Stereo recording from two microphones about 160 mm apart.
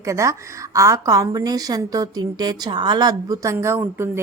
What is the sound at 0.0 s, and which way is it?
A woman's voice, 20° right (ahead or behind).